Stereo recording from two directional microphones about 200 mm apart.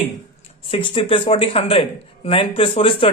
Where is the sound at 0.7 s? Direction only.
25° left (ahead or behind).